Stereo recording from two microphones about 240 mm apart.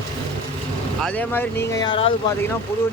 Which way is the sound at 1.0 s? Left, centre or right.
Centre.